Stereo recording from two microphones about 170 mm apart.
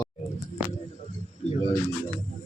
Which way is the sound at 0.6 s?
10° right (ahead or behind).